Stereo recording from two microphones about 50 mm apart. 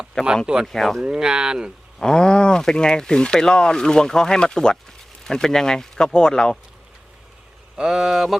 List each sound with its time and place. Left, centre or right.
0.4 s speech: centre
0.7 s speech: centre
1.0 s speech: centre
2.0 s speech: centre
7.8 s speech: centre